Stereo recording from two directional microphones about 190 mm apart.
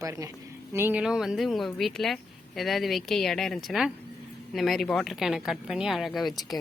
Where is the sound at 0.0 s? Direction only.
15° right (ahead or behind).